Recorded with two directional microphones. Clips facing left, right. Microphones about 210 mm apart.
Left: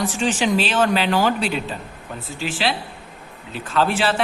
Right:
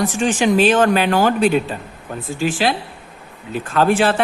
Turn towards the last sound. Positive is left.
turn(degrees=-50)  # may be behind; listen again after turning